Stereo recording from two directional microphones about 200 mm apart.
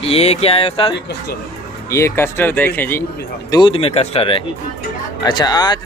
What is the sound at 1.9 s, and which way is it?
Speech, 15° left (ahead or behind).